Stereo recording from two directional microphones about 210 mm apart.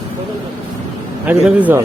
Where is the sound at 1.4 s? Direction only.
10° right (ahead or behind).